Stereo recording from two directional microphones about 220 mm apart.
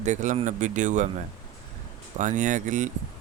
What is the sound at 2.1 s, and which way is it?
Speech, 35° right (ahead or behind).